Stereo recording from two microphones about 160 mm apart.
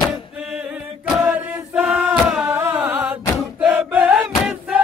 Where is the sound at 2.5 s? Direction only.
15° right (ahead or behind).